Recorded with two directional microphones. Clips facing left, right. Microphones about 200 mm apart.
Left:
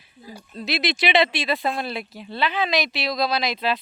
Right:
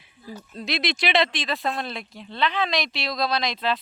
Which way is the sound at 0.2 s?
15° left (ahead or behind).